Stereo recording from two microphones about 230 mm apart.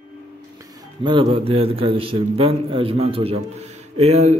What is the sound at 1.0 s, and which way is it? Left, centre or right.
A man's voice, right.